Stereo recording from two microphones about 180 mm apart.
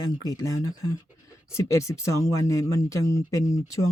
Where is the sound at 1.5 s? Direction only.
15° left (ahead or behind).